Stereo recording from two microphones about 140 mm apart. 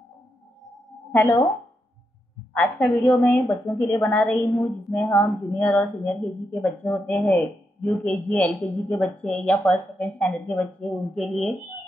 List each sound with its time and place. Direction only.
1.1 s speech: 15° left (ahead or behind)
2.5 s a woman's voice: 5° left (ahead or behind)